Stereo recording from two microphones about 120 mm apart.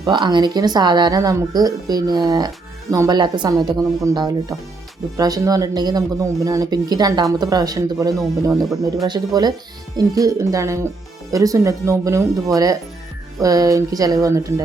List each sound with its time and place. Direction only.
0.0 s speech: 40° right (ahead or behind)
13.4 s speech: 30° right (ahead or behind)